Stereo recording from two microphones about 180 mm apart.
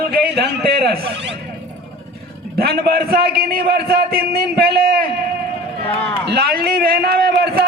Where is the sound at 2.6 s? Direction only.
60° right (ahead or behind).